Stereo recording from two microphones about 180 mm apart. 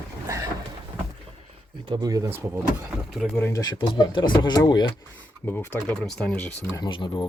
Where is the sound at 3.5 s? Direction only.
25° left (ahead or behind).